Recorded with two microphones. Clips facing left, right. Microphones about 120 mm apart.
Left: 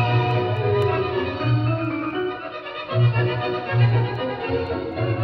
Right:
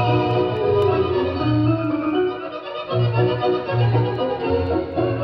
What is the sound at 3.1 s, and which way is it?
Music, 25° right (ahead or behind).